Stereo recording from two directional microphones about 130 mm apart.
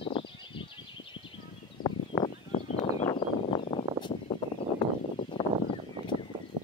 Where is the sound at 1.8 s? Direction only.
40° left (ahead or behind).